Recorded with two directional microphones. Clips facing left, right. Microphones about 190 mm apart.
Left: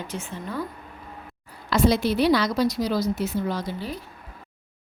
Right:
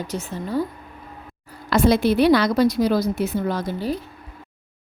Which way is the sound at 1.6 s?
55° right (ahead or behind).